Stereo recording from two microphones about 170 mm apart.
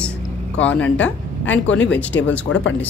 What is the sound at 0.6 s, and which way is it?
Speech, 10° left (ahead or behind).